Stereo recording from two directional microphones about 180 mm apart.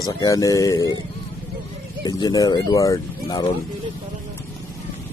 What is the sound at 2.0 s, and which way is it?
Speech, 20° left (ahead or behind).